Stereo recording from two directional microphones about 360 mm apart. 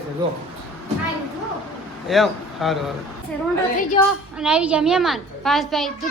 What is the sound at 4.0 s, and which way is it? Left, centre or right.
Speech, centre.